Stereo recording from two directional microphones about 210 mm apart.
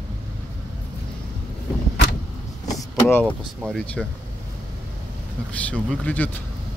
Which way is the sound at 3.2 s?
5° right (ahead or behind).